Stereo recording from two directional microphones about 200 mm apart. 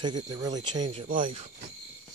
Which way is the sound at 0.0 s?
20° right (ahead or behind).